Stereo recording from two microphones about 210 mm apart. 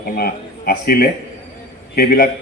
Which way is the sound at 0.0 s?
45° left (ahead or behind).